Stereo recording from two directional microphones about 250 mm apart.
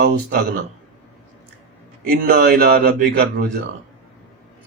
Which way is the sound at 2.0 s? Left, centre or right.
Right.